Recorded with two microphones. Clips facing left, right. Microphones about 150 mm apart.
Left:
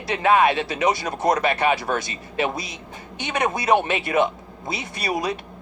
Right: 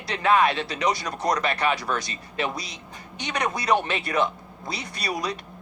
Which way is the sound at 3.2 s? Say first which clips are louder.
Left 3 dB; 25° left (ahead or behind).